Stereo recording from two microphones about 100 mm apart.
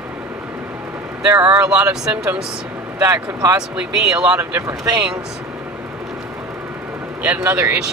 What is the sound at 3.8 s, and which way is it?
Speech, 10° right (ahead or behind).